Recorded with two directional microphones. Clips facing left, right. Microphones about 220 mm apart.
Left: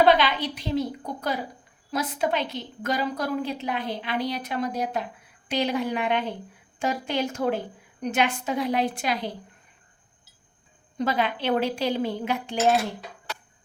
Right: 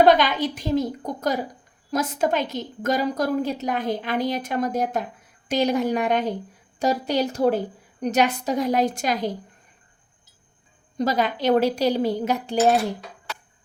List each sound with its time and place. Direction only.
0.0 s a woman's voice: 45° right (ahead or behind)
10.9 s speech: 40° right (ahead or behind)